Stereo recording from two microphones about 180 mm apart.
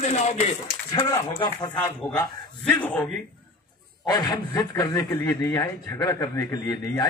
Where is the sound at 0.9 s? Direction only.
25° left (ahead or behind).